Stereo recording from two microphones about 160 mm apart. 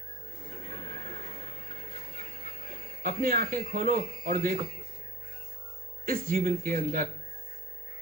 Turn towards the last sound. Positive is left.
turn(degrees=-55)  # may be behind; listen again after turning